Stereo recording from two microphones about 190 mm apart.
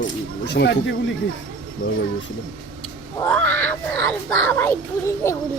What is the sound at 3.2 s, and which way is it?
Speech, 10° left (ahead or behind).